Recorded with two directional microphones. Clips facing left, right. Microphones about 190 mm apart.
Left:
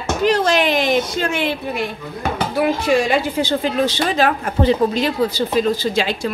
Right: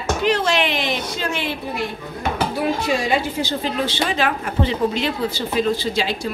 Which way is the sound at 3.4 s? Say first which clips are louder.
Left 4 dB; 60° left (ahead or behind).